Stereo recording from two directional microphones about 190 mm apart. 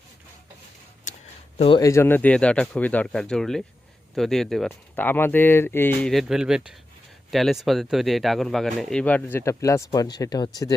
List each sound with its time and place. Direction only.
1.1 s a sound: 40° left (ahead or behind)
1.5 s speech: 30° left (ahead or behind)
1.8 s speech: 15° left (ahead or behind)